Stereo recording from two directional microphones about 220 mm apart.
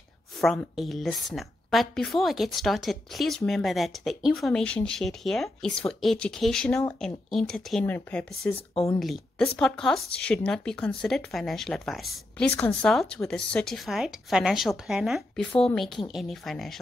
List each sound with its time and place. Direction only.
0.4 s a woman's voice: centre (ahead or behind)